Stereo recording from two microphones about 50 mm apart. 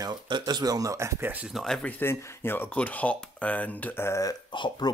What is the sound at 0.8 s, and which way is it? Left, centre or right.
Speech, right.